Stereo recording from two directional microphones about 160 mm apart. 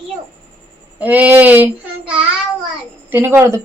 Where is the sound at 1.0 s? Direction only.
10° right (ahead or behind).